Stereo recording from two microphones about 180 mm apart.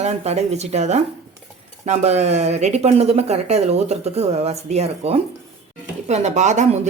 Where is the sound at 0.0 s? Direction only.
40° right (ahead or behind).